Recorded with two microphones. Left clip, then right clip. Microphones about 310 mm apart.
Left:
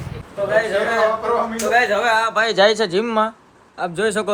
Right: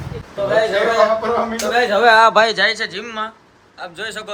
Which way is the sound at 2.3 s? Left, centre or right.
Centre.